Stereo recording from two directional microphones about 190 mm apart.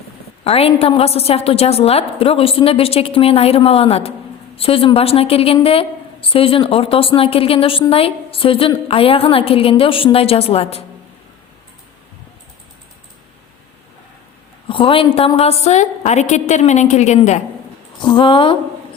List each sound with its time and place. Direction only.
0.4 s a woman's voice: 30° left (ahead or behind)
14.7 s a woman's voice: 25° left (ahead or behind)
18.0 s a woman's voice: 25° left (ahead or behind)